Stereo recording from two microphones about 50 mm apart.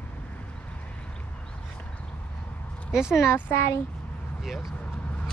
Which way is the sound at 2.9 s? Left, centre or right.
Centre.